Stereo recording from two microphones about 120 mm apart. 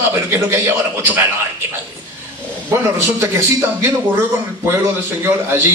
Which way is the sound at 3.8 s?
20° right (ahead or behind).